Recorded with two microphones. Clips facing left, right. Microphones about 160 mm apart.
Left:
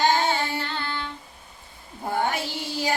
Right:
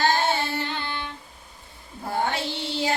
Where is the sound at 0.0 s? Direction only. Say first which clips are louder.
Left 1 dB; 15° left (ahead or behind).